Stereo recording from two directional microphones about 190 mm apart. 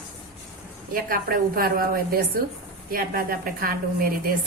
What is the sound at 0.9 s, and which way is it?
A woman's voice, 50° right (ahead or behind).